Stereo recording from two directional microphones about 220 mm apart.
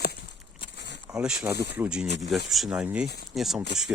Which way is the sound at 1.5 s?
45° left (ahead or behind).